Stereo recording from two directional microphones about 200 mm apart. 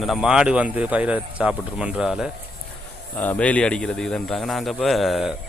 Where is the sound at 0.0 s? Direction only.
Centre (ahead or behind).